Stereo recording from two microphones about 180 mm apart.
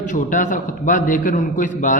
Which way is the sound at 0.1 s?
50° left (ahead or behind).